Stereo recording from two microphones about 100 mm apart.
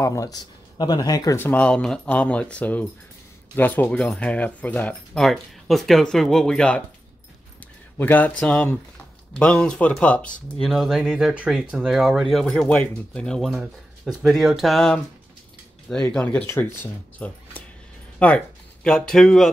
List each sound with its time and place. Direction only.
0.0 s speech: 35° left (ahead or behind)
1.4 s speech: 15° left (ahead or behind)
5.1 s speech: centre (ahead or behind)
8.0 s speech: 15° left (ahead or behind)
10.6 s speech: centre (ahead or behind)
13.5 s speech: 5° right (ahead or behind); by 16.4 s 15° left (ahead or behind)
16.4 s speech: 25° left (ahead or behind); by 19.5 s 5° left (ahead or behind)